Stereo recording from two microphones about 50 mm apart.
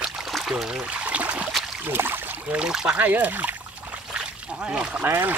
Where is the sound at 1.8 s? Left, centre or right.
Right.